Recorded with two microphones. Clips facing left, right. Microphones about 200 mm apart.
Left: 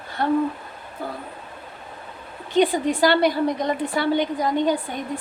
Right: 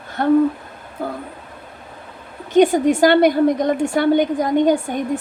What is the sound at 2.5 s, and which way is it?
A woman's voice, 45° right (ahead or behind).